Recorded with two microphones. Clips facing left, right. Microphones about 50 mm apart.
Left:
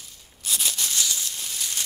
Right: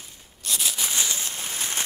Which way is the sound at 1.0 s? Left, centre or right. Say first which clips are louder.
Right 1 dB; right.